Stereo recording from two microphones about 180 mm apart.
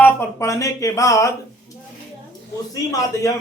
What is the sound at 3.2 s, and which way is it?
Speech, 20° left (ahead or behind).